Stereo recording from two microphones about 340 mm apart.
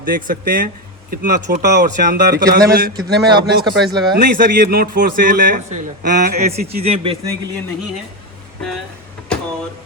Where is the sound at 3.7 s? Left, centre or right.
Centre.